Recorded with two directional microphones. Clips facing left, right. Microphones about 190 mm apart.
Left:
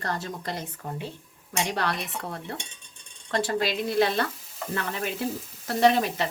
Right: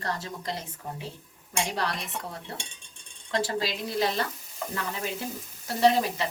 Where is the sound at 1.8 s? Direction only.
60° left (ahead or behind).